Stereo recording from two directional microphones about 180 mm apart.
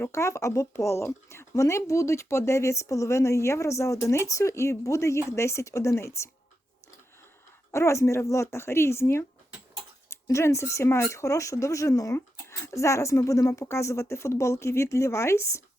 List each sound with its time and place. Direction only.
0.0 s speech: 15° left (ahead or behind)
7.7 s speech: 15° left (ahead or behind)